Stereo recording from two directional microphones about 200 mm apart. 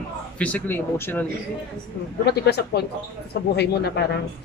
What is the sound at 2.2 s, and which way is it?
Speech, 55° left (ahead or behind).